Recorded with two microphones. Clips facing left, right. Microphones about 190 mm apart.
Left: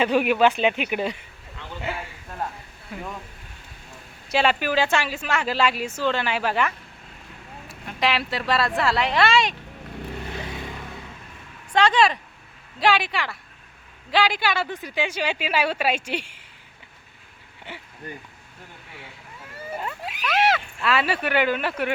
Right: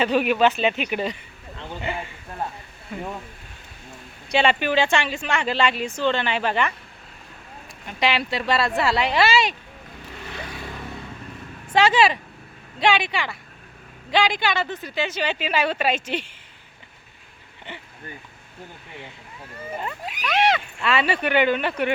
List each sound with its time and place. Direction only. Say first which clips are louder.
0.0 s a woman's voice: even; 10° left (ahead or behind)
1.9 s a sound: right 2 dB; 5° left (ahead or behind)
2.9 s speech: right 3 dB; 5° left (ahead or behind)
4.3 s speech: right 1 dB; 5° left (ahead or behind)
7.9 s speech: right 1 dB; centre (ahead or behind)
11.7 s a woman's voice: right 1 dB; 5° right (ahead or behind); by 16.4 s 10° left (ahead or behind)
17.7 s a woman's voice: right 1 dB; 10° left (ahead or behind)
19.8 s speech: even; centre (ahead or behind)